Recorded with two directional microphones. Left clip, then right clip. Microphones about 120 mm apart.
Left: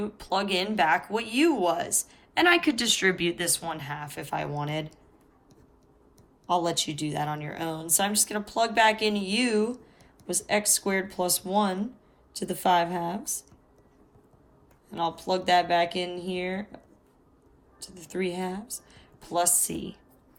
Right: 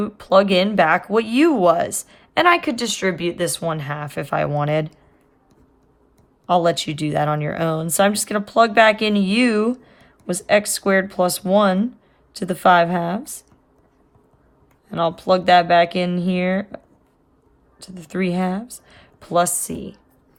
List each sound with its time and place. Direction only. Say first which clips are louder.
0.0 s speech: right 13 dB; 40° right (ahead or behind)
6.5 s speech: right 9 dB; 55° right (ahead or behind)
12.3 s speech: right 9 dB; 45° right (ahead or behind)
14.8 s speech: right 10 dB; 50° right (ahead or behind)